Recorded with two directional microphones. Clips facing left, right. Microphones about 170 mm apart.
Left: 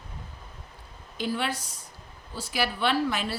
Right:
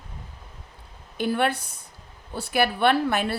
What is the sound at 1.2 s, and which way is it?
A woman's voice, 55° right (ahead or behind).